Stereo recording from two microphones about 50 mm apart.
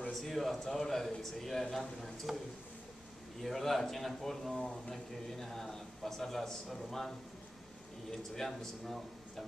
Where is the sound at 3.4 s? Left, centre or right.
Centre.